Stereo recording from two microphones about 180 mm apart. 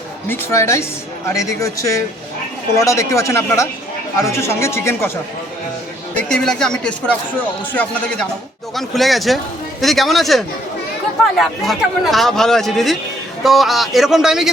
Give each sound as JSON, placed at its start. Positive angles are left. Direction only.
{"t": 0.3, "sound": "speech", "side_deg": 15}
{"t": 6.1, "sound": "speech", "side_deg": 5}